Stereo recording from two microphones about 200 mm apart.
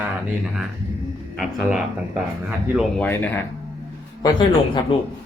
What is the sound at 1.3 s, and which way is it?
Speech, 5° right (ahead or behind).